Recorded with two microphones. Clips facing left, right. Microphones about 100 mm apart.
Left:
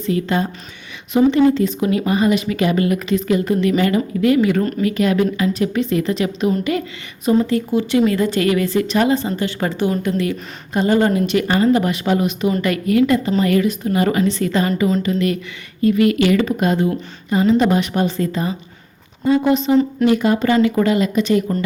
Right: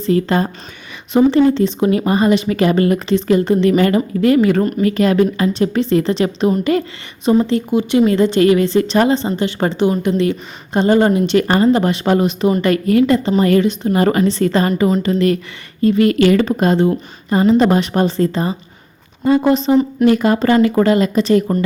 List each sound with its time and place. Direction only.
0.0 s speech: 40° right (ahead or behind)
6.7 s speech: 40° right (ahead or behind)
7.3 s a woman's voice: 25° right (ahead or behind)
11.3 s speech: 45° right (ahead or behind)
19.2 s a woman's voice: 55° right (ahead or behind); by 21.6 s 35° right (ahead or behind)